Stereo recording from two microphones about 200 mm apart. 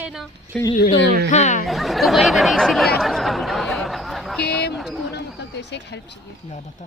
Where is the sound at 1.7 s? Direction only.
Centre (ahead or behind).